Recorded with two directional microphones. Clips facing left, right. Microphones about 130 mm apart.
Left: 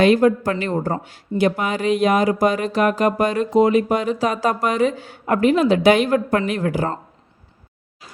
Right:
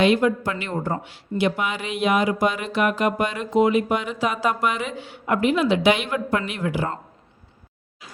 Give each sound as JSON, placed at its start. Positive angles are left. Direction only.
{"t": 0.0, "sound": "speech", "side_deg": 40}